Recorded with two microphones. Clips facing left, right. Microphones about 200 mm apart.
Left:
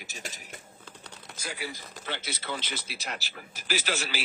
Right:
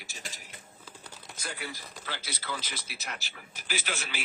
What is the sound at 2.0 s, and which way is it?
A man's voice, 25° left (ahead or behind).